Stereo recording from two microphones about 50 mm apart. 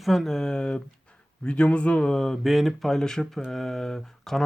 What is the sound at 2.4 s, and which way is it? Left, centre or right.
Speech, centre.